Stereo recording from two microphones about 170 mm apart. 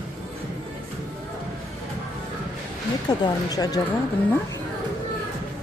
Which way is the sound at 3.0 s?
25° left (ahead or behind).